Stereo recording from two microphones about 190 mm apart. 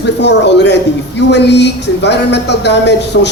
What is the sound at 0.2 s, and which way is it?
Speech, 65° left (ahead or behind).